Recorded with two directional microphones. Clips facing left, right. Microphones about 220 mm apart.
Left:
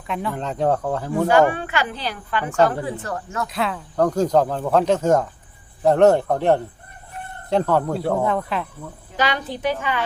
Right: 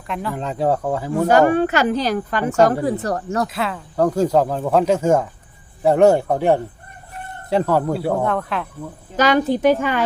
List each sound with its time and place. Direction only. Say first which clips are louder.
0.1 s speech: right 1 dB; centre (ahead or behind)
1.3 s a woman's voice: right 4 dB; 45° right (ahead or behind)
3.5 s speech: even; centre (ahead or behind)
9.1 s a woman's voice: right 8 dB; 45° right (ahead or behind)